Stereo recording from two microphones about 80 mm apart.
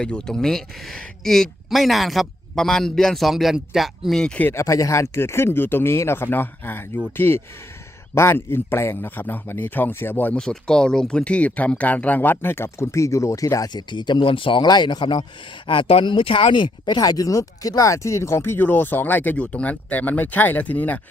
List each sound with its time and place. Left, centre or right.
0.0 s speech: centre
4.6 s speech: left
10.3 s speech: centre; by 13.7 s left
13.7 s speech: left
15.6 s speech: left; by 21.0 s centre